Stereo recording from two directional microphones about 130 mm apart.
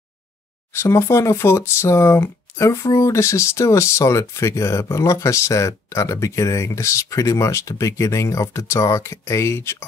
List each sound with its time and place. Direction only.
0.7 s speech: 20° left (ahead or behind)